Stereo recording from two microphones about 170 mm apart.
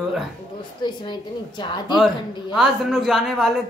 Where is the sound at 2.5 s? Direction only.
5° right (ahead or behind).